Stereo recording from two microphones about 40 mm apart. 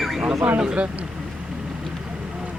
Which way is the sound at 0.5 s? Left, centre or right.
Right.